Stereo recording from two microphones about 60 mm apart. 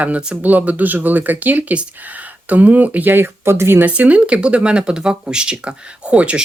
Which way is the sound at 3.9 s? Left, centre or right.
Right.